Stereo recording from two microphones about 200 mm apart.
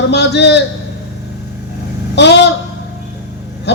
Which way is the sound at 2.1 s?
60° left (ahead or behind).